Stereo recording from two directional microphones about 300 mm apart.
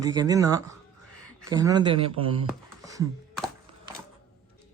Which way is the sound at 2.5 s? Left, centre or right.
Centre.